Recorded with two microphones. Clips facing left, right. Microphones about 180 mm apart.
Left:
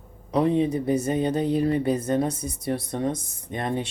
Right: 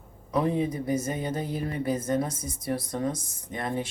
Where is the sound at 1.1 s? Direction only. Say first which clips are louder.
Left 8 dB; 65° left (ahead or behind).